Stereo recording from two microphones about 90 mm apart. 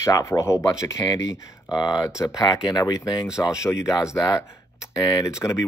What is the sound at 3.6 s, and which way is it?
Speech, 35° left (ahead or behind).